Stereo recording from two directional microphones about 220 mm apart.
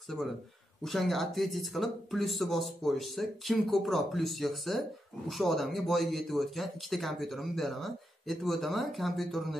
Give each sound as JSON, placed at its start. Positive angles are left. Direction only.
{"t": 0.8, "sound": "speech", "side_deg": 0}